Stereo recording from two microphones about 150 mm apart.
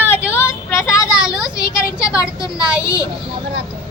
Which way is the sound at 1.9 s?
20° left (ahead or behind).